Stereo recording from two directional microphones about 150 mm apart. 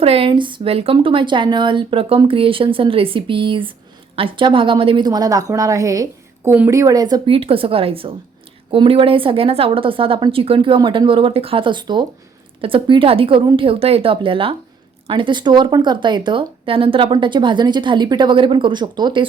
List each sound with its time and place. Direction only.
0.0 s a woman's voice: 40° right (ahead or behind)
7.3 s speech: 40° right (ahead or behind)